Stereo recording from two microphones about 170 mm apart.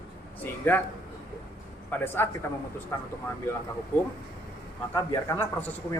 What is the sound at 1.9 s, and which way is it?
A man's voice, 15° left (ahead or behind).